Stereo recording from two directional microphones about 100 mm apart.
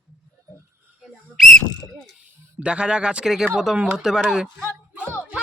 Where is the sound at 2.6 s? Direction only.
10° right (ahead or behind).